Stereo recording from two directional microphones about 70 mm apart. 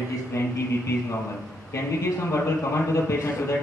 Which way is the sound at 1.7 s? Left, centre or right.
Left.